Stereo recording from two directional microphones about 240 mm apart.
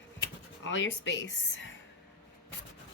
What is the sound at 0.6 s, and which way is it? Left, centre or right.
A woman's voice, left.